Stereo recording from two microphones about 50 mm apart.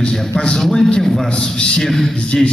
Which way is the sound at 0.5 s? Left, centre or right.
Centre.